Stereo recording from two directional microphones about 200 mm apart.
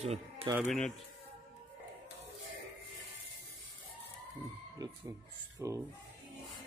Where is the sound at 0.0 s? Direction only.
30° right (ahead or behind).